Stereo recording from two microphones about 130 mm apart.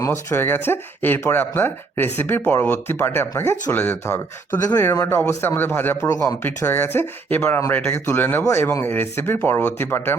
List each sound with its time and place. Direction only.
0.0 s speech: 20° left (ahead or behind)